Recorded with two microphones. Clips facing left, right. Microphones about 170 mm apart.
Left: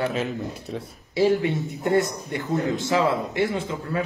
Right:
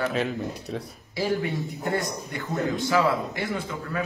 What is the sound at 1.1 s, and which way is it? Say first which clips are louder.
A man's voice: left 6 dB; 25° left (ahead or behind).